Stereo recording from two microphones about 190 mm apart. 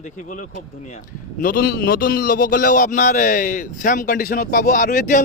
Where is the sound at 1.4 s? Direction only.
50° left (ahead or behind).